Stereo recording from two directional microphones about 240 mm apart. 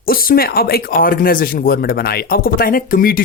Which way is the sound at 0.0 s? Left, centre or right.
Left.